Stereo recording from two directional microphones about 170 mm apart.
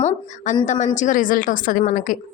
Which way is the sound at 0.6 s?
45° left (ahead or behind).